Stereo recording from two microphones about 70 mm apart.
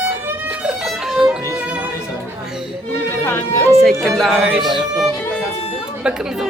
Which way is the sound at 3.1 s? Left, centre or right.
Left.